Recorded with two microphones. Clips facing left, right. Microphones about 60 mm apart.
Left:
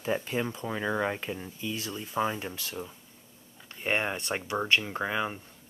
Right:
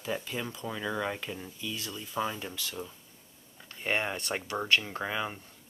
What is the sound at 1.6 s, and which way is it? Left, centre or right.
Speech, left.